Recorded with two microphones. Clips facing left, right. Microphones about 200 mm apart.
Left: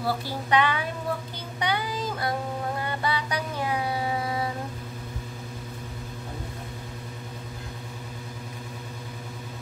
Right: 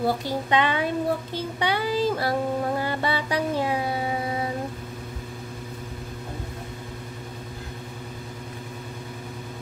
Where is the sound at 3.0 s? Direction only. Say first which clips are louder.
Right 3 dB; 25° right (ahead or behind).